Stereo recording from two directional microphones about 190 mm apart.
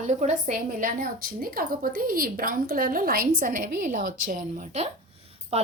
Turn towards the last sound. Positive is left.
turn(degrees=-30)  # may be behind; listen again after turning